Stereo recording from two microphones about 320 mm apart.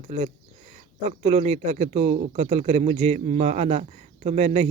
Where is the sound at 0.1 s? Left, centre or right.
Centre.